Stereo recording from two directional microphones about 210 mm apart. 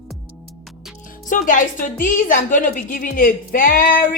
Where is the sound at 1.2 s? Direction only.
40° left (ahead or behind).